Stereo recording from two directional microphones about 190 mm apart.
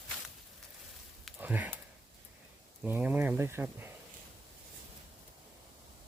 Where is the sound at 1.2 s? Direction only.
10° right (ahead or behind).